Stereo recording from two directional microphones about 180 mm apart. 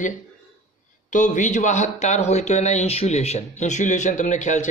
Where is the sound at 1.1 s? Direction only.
45° left (ahead or behind).